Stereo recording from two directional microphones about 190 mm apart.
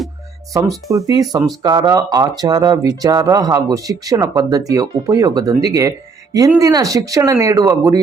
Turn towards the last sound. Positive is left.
turn(degrees=-15)  # may be behind; listen again after turning